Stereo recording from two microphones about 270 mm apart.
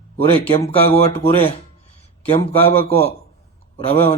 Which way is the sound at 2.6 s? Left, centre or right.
Left.